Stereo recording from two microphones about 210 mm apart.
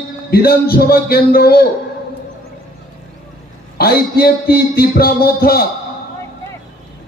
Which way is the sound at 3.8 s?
45° left (ahead or behind).